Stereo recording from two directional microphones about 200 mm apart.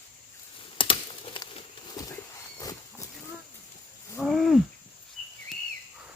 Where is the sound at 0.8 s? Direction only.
25° left (ahead or behind).